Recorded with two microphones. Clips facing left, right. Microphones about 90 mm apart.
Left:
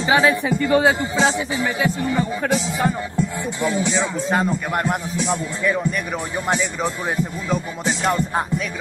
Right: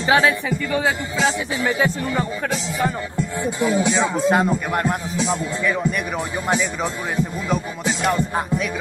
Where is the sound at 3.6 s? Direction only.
10° right (ahead or behind).